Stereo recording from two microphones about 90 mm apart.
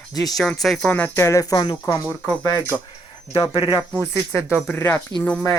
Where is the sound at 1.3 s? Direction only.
40° left (ahead or behind).